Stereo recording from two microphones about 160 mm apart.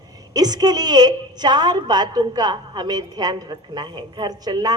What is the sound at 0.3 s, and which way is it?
A woman's voice, 25° right (ahead or behind).